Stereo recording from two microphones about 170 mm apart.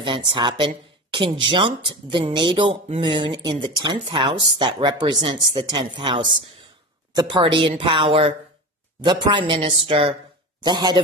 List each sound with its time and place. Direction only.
0.3 s speech: 25° right (ahead or behind)
7.2 s speech: 30° right (ahead or behind)